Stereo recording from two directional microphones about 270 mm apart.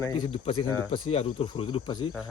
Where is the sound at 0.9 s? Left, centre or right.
Left.